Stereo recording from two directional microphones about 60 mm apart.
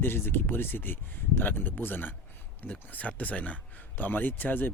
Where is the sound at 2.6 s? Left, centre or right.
Left.